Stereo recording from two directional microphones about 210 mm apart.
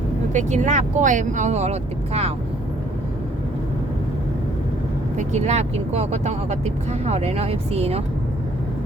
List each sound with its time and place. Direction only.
0.3 s speech: 35° right (ahead or behind)
5.1 s speech: 35° right (ahead or behind)